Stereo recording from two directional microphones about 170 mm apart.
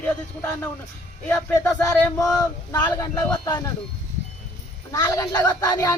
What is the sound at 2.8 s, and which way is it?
Speech, 10° left (ahead or behind).